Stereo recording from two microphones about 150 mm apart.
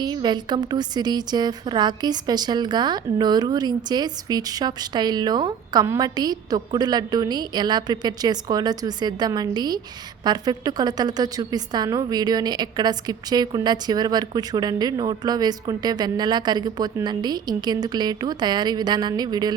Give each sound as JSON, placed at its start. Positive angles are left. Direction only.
{"t": 0.0, "sound": "a woman's voice", "side_deg": -30}